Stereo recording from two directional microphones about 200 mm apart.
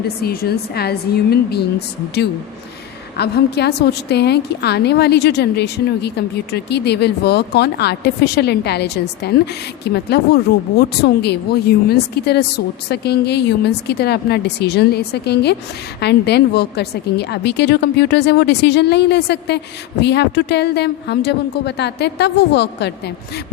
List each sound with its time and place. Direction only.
0.2 s a woman's voice: 50° left (ahead or behind)
3.2 s a woman's voice: 55° left (ahead or behind)